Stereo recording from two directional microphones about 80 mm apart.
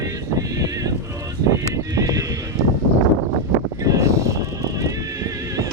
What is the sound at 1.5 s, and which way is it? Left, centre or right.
Horse, right.